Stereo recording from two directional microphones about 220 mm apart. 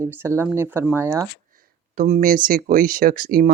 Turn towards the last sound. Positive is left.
turn(degrees=-40)  # may be behind; listen again after turning